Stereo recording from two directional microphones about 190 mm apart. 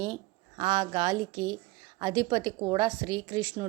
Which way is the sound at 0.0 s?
25° right (ahead or behind).